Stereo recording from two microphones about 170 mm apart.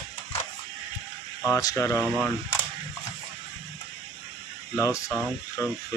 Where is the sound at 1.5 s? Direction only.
20° left (ahead or behind).